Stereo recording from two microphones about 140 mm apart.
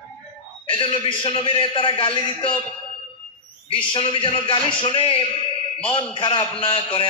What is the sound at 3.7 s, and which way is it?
A man's voice, 40° left (ahead or behind).